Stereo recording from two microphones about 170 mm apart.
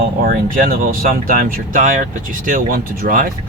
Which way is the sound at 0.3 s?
60° right (ahead or behind).